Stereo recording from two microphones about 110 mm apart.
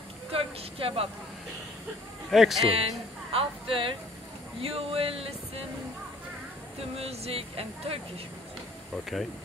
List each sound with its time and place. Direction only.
0.3 s speech: 60° right (ahead or behind)
2.3 s speech: centre (ahead or behind)
2.7 s a woman's voice: 60° right (ahead or behind)
4.6 s music: 60° right (ahead or behind)
7.0 s music: 65° right (ahead or behind)
8.9 s speech: centre (ahead or behind)